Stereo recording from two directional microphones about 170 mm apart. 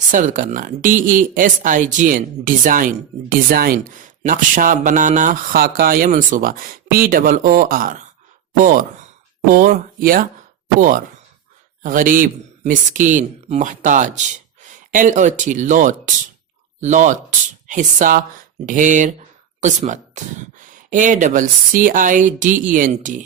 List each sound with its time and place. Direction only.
0.1 s speech: 50° right (ahead or behind)